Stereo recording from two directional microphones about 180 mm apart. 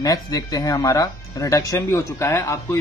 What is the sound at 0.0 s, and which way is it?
A man's voice, 20° left (ahead or behind).